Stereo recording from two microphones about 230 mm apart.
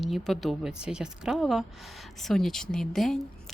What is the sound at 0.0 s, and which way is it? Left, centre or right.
Speech, centre.